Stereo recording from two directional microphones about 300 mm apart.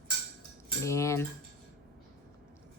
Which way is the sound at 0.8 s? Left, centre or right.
Centre.